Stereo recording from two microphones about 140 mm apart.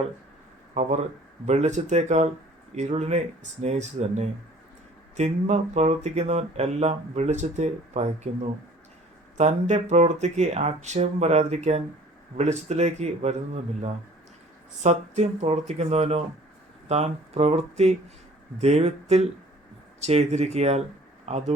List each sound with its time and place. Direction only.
0.7 s speech: 55° right (ahead or behind)